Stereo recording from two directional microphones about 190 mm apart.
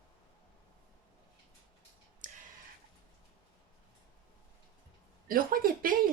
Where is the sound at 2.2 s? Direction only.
40° right (ahead or behind).